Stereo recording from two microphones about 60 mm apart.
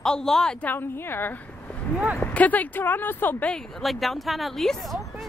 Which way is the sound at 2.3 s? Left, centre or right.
Left.